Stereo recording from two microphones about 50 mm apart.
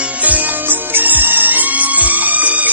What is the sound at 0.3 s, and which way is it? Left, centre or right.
Music, right.